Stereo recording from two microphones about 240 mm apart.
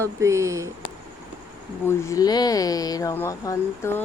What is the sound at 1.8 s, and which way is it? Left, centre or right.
Speech, centre.